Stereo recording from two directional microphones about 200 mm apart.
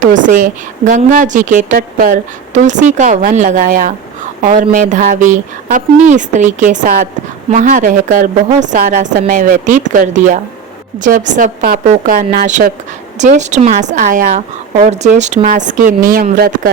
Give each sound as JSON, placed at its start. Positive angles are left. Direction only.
{"t": 0.0, "sound": "a woman's voice", "side_deg": -40}